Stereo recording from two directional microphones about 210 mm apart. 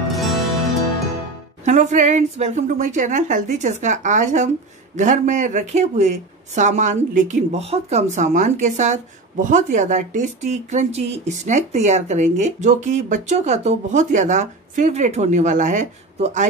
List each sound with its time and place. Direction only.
0.1 s music: centre (ahead or behind)
1.6 s speech: 35° right (ahead or behind)